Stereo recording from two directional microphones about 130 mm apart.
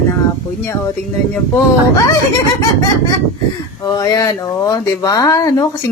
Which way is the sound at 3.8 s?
30° left (ahead or behind).